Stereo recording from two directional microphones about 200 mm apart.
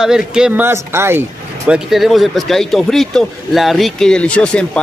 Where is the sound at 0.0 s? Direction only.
5° right (ahead or behind).